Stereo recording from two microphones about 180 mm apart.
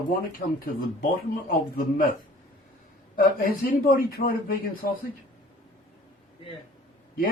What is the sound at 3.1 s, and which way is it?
Speech, 50° left (ahead or behind).